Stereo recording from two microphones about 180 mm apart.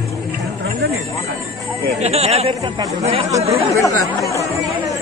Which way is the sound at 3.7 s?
15° left (ahead or behind).